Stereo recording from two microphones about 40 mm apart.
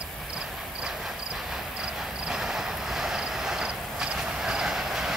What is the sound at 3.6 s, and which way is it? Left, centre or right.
Vehicle, right.